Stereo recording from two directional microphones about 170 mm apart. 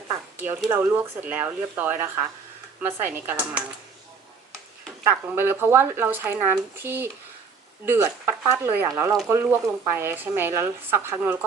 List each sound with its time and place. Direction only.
0.7 s speech: 10° right (ahead or behind)
5.0 s speech: 15° right (ahead or behind)